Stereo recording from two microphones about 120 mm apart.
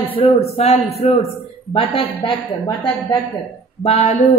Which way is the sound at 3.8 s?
65° left (ahead or behind).